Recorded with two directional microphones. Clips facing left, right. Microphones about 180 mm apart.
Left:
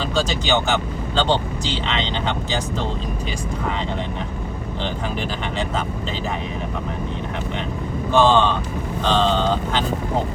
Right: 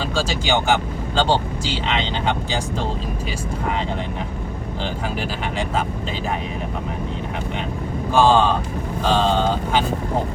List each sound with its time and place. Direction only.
0.2 s speech: 10° right (ahead or behind)
8.1 s speech: 10° right (ahead or behind)